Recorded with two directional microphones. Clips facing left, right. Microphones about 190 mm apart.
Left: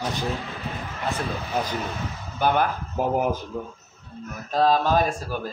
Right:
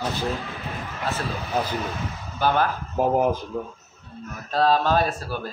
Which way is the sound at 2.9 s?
25° right (ahead or behind).